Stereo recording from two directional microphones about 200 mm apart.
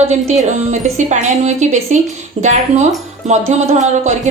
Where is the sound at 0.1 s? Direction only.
35° right (ahead or behind).